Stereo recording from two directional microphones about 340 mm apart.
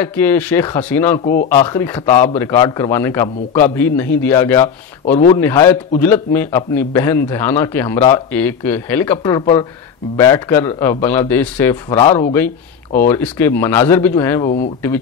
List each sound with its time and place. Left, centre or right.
0.0 s speech: centre
1.2 s speech: left
1.5 s a man's voice: centre